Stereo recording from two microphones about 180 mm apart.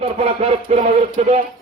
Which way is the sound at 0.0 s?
35° right (ahead or behind).